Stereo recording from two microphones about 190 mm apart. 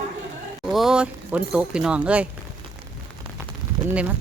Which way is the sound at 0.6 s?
Centre (ahead or behind).